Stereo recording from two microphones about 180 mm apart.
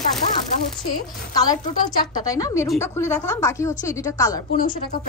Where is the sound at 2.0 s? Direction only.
20° left (ahead or behind).